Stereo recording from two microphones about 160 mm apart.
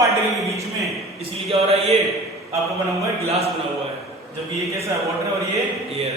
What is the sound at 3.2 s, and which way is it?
Speech, 40° right (ahead or behind).